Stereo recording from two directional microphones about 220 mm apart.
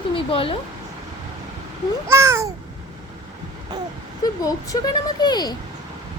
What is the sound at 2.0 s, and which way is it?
Babbling, 10° right (ahead or behind).